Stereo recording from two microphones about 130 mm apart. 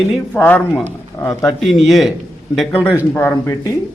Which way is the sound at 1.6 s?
Centre (ahead or behind).